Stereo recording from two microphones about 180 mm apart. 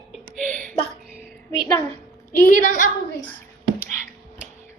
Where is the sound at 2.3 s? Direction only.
50° left (ahead or behind).